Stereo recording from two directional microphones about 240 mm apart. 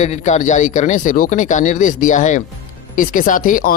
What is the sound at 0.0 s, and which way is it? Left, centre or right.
Speech, left.